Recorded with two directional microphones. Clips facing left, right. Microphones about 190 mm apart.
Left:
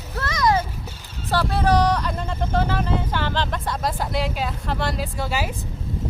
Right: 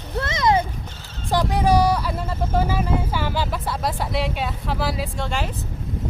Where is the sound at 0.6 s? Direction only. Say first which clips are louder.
Right 2 dB; 5° left (ahead or behind).